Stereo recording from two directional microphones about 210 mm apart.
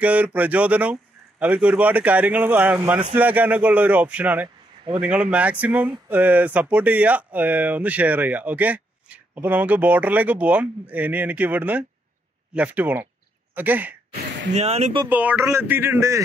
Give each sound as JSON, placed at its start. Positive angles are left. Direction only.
{"t": 0.0, "sound": "speech", "side_deg": -5}
{"t": 14.5, "sound": "speech", "side_deg": -30}
{"t": 15.0, "sound": "speech", "side_deg": -10}